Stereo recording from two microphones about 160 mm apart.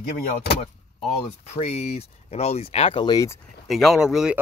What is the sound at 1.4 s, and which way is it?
Speech, 45° left (ahead or behind).